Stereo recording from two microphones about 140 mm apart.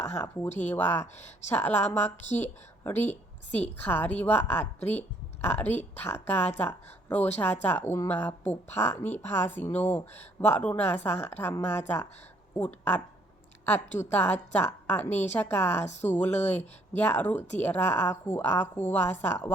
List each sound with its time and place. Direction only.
0.6 s a woman's voice: 15° left (ahead or behind)
14.0 s a woman's voice: 15° left (ahead or behind)
15.8 s speech: 55° left (ahead or behind)
16.0 s a woman's voice: 15° left (ahead or behind)